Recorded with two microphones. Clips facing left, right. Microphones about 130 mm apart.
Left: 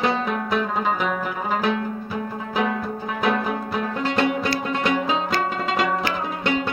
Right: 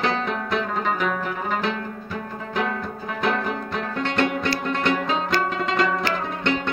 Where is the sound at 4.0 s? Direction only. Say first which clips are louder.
Left 1 dB; 5° left (ahead or behind).